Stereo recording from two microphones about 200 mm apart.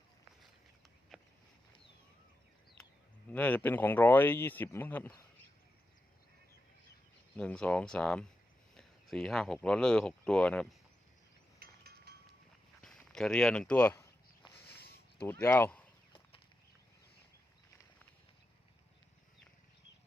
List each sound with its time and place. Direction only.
3.3 s speech: 10° left (ahead or behind)
7.3 s speech: 5° left (ahead or behind)
11.6 s mechanisms: 50° right (ahead or behind)
12.8 s a sound: 5° left (ahead or behind)
14.7 s a sound: 50° left (ahead or behind)
15.3 s speech: 10° left (ahead or behind)